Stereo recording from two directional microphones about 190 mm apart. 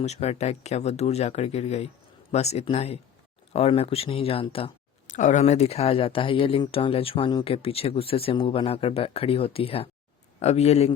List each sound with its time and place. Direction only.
0.0 s speech: 35° left (ahead or behind)